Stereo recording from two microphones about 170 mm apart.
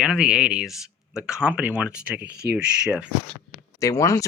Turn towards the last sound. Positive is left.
turn(degrees=20)  # may be behind; listen again after turning